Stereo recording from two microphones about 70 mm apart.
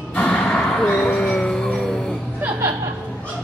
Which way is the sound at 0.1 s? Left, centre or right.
Centre.